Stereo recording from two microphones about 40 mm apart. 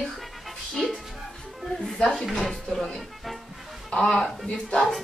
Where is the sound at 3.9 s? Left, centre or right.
Centre.